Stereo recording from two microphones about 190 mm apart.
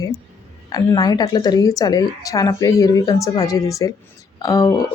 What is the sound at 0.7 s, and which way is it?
Speech, 20° left (ahead or behind).